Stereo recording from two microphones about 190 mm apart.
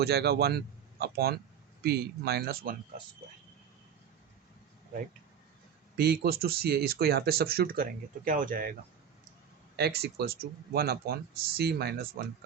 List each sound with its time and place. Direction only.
0.0 s a man's voice: 60° right (ahead or behind)
6.0 s speech: 55° right (ahead or behind)
9.7 s speech: 55° right (ahead or behind)